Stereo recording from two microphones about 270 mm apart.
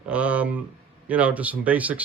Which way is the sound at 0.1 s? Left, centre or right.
Centre.